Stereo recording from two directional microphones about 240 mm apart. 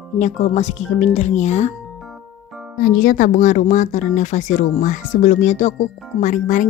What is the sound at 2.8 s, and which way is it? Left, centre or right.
Speech, left.